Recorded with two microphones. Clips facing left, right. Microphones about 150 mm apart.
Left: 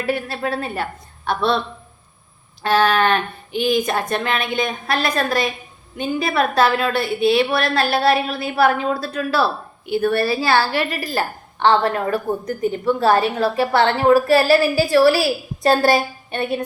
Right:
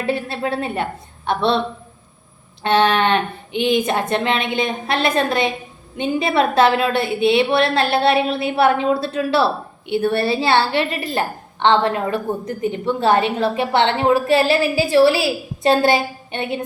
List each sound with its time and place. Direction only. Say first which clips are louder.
0.0 s a woman's voice: right 1 dB; 25° right (ahead or behind)
2.6 s a woman's voice: right 1 dB; 30° right (ahead or behind)